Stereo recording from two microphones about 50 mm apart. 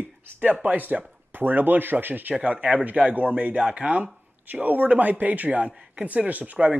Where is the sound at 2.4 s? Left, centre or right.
Right.